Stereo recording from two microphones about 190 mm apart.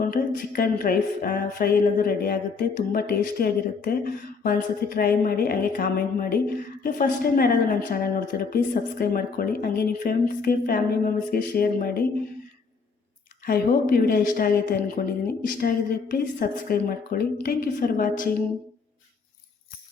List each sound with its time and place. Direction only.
0.0 s music: 50° left (ahead or behind)
13.4 s music: 50° left (ahead or behind)